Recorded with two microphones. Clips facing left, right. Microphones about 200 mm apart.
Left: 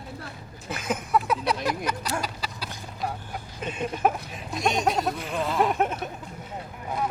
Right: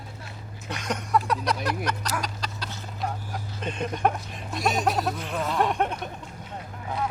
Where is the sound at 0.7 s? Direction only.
5° left (ahead or behind).